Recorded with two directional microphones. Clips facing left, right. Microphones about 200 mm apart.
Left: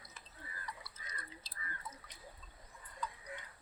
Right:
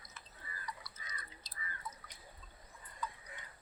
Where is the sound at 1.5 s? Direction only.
25° left (ahead or behind).